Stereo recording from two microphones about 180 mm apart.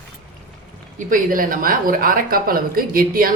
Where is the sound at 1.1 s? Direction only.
50° right (ahead or behind).